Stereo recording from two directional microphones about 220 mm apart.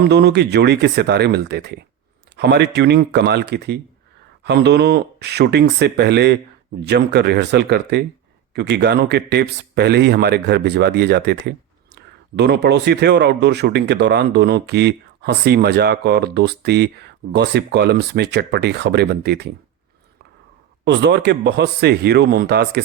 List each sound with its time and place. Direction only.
0.0 s speech: 50° right (ahead or behind)
20.8 s speech: 50° right (ahead or behind)